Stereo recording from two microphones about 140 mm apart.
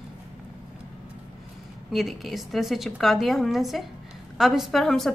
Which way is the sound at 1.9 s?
Centre (ahead or behind).